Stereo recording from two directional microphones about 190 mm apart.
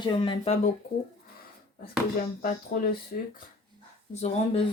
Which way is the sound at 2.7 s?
50° left (ahead or behind).